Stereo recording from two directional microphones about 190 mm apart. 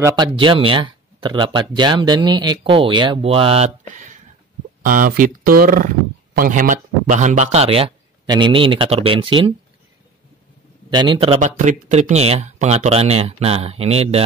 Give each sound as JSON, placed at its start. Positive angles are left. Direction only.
{"t": 0.0, "sound": "speech", "side_deg": -20}
{"t": 10.9, "sound": "speech", "side_deg": -25}